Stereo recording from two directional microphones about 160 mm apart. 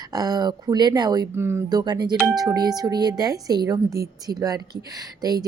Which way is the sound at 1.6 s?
25° right (ahead or behind).